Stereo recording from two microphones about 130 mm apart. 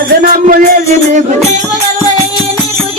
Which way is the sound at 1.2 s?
65° right (ahead or behind).